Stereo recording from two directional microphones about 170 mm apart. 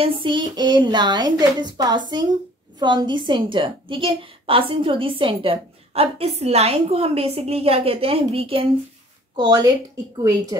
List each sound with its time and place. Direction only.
0.0 s a woman's voice: 30° right (ahead or behind)